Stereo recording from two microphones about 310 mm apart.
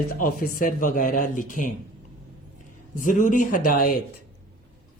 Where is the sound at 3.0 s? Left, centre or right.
Left.